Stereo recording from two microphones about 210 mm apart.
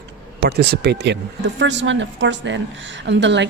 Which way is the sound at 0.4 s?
50° right (ahead or behind).